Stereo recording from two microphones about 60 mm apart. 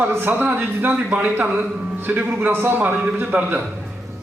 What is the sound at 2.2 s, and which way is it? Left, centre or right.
Speech, right.